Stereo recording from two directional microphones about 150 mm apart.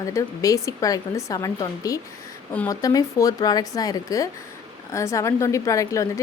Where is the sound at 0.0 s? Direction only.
20° left (ahead or behind).